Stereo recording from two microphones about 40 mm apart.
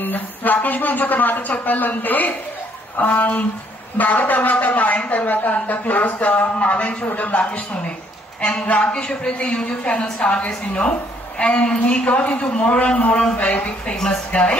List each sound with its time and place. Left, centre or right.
0.0 s a man's voice: left
13.9 s a woman's voice: centre
14.3 s a man's voice: left